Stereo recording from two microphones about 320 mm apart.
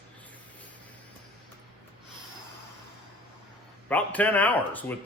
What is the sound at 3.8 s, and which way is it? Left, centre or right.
Speech, centre.